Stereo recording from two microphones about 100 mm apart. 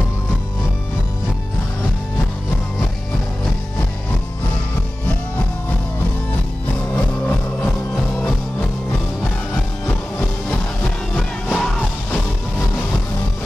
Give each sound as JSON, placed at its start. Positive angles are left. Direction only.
{"t": 7.0, "sound": "music", "side_deg": 15}
{"t": 9.8, "sound": "music", "side_deg": 15}